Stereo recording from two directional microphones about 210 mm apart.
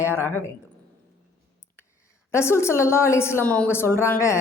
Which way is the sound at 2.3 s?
10° left (ahead or behind).